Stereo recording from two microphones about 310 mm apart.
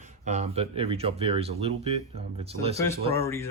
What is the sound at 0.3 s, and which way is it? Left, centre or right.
Speech, right.